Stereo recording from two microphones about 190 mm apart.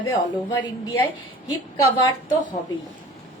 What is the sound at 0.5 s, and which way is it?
Speech, 20° left (ahead or behind).